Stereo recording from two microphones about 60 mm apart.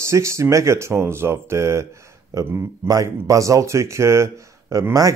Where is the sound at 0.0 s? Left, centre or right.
Right.